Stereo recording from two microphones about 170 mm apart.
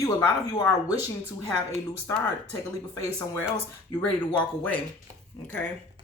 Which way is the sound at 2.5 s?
20° left (ahead or behind).